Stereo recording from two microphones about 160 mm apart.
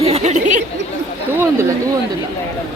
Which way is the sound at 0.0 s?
40° right (ahead or behind).